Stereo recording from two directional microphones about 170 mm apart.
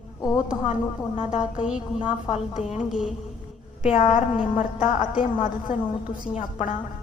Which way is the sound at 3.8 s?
45° left (ahead or behind).